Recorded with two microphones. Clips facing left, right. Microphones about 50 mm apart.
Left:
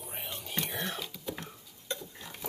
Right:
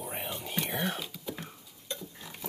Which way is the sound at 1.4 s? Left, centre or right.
Centre.